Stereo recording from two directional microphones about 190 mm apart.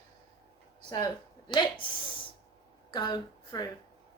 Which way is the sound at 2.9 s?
20° left (ahead or behind).